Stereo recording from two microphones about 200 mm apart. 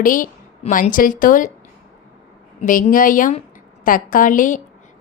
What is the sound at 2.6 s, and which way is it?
A woman's voice, 45° left (ahead or behind).